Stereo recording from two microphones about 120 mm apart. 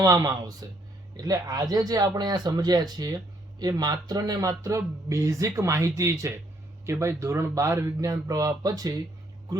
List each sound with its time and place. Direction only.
0.0 s speech: 30° right (ahead or behind)